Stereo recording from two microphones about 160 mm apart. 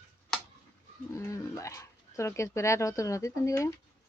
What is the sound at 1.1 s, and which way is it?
Speech, 20° left (ahead or behind).